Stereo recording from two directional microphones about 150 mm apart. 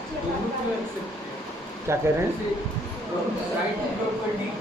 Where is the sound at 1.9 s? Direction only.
20° right (ahead or behind).